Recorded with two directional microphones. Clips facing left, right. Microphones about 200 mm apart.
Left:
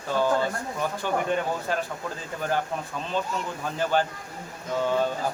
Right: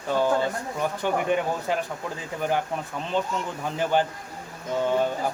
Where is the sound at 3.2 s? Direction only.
20° right (ahead or behind).